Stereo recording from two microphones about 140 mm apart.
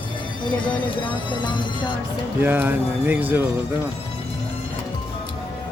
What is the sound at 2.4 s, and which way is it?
Speech, 15° right (ahead or behind).